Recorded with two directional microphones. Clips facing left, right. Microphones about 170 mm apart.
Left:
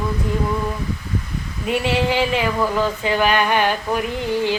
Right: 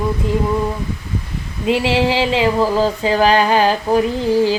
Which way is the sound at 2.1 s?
25° right (ahead or behind).